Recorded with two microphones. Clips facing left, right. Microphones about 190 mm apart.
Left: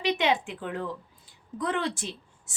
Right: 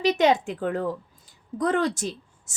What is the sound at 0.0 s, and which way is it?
A woman's voice, 40° right (ahead or behind).